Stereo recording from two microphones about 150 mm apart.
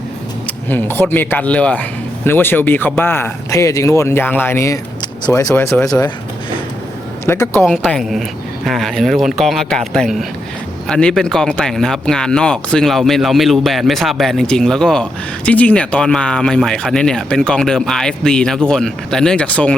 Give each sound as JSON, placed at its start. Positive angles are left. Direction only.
{"t": 0.4, "sound": "speech", "side_deg": 15}
{"t": 7.3, "sound": "speech", "side_deg": 15}
{"t": 7.6, "sound": "speech", "side_deg": 0}